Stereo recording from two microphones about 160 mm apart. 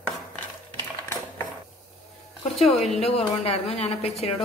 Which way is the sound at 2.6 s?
40° left (ahead or behind).